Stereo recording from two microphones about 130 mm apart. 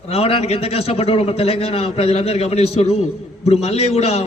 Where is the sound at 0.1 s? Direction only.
50° left (ahead or behind).